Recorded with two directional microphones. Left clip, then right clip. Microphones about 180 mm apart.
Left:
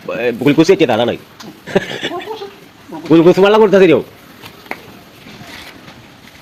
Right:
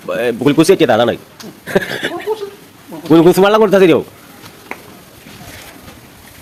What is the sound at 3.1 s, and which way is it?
Speech, 35° right (ahead or behind).